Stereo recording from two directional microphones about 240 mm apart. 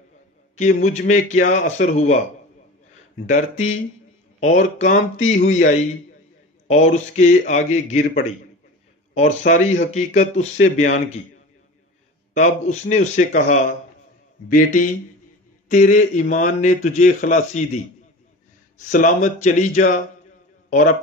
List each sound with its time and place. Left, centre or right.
0.6 s a man's voice: left
3.3 s speech: left
12.4 s a man's voice: left
18.9 s a man's voice: left